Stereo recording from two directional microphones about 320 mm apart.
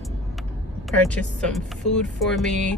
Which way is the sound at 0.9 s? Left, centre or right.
Centre.